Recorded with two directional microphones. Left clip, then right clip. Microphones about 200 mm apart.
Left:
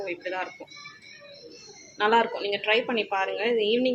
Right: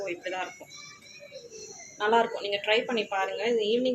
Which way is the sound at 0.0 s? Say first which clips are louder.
Left 2 dB; 10° left (ahead or behind).